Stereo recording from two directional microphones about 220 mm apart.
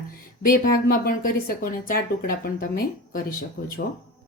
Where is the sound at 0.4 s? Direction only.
40° left (ahead or behind).